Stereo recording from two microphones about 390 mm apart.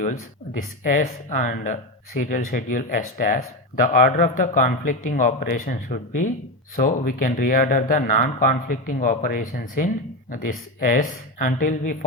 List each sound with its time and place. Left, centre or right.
0.0 s speech: centre